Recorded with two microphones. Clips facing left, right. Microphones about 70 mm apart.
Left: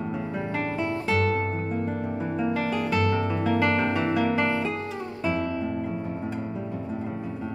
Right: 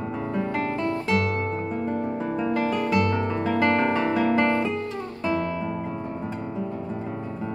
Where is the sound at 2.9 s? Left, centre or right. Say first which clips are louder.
Even; centre.